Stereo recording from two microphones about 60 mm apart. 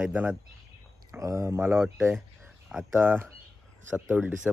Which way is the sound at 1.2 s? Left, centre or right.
Right.